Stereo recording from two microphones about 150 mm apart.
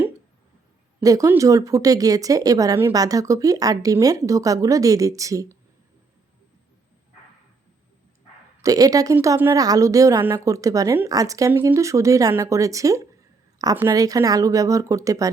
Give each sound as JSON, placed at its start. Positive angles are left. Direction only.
{"t": 1.0, "sound": "speech", "side_deg": -20}
{"t": 8.6, "sound": "speech", "side_deg": -25}